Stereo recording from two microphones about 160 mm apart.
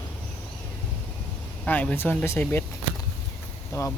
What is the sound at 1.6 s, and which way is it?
Speech, 10° left (ahead or behind).